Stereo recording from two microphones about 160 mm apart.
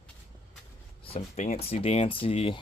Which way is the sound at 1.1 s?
40° left (ahead or behind).